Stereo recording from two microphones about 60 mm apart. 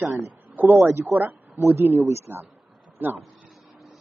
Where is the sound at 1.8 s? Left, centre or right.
Right.